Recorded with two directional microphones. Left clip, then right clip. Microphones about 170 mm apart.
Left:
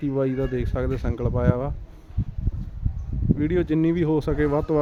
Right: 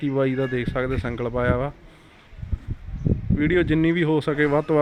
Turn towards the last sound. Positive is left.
turn(degrees=0)  # may be behind; listen again after turning